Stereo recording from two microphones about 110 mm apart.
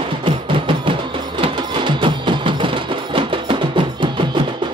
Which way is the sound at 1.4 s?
45° right (ahead or behind).